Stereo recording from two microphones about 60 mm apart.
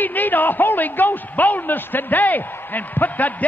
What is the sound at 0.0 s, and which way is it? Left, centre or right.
A man's voice, left.